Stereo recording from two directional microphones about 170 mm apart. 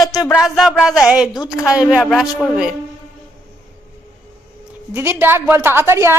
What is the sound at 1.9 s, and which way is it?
Speech, 5° right (ahead or behind).